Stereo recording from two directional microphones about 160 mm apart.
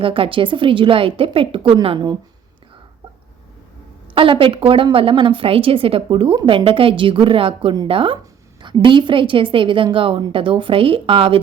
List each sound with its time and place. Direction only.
0.0 s a woman's voice: 35° right (ahead or behind)
4.1 s a woman's voice: 35° right (ahead or behind)